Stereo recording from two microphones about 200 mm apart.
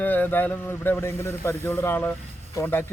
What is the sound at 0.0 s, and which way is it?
Speech, 10° left (ahead or behind).